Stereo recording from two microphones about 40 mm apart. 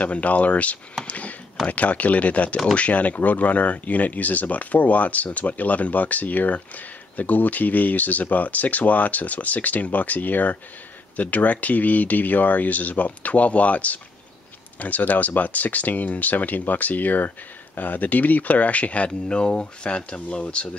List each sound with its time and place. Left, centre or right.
0.0 s speech: left